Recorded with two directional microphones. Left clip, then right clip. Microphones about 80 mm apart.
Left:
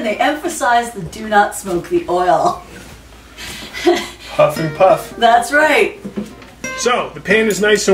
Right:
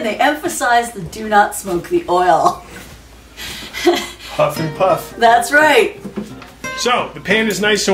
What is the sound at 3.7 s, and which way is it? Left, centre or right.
Speech, centre.